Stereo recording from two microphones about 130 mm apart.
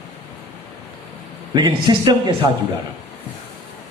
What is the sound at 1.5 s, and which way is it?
Speech, 35° right (ahead or behind).